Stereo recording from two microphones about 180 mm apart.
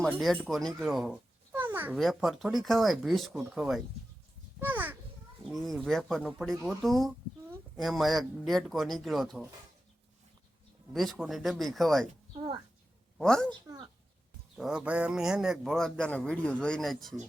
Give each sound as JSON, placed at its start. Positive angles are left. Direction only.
{"t": 0.0, "sound": "speech", "side_deg": 0}
{"t": 2.0, "sound": "a man's voice", "side_deg": 0}
{"t": 4.6, "sound": "a sound", "side_deg": -10}
{"t": 5.4, "sound": "a man's voice", "side_deg": 0}
{"t": 10.9, "sound": "a man's voice", "side_deg": 0}
{"t": 12.3, "sound": "a child's voice", "side_deg": -25}
{"t": 13.1, "sound": "a woman's voice", "side_deg": 5}
{"t": 13.5, "sound": "speech", "side_deg": -25}
{"t": 14.6, "sound": "a man's voice", "side_deg": -5}